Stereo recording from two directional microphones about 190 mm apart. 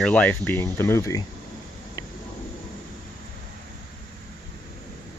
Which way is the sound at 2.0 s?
20° left (ahead or behind).